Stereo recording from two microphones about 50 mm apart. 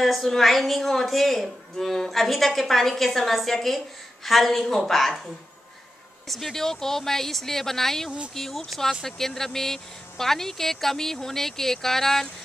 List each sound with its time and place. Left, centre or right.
0.0 s a woman's voice: centre